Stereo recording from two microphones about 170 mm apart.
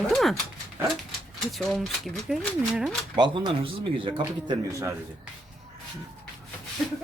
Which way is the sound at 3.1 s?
30° right (ahead or behind).